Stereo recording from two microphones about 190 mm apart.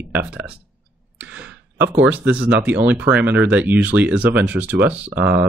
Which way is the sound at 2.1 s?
5° right (ahead or behind).